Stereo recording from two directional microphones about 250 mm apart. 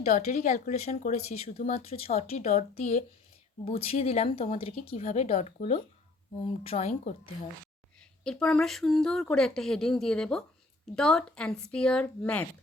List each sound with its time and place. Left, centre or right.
0.0 s speech: left
8.2 s speech: centre